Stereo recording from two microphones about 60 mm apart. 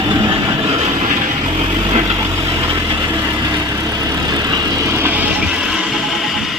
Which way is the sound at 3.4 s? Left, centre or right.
Right.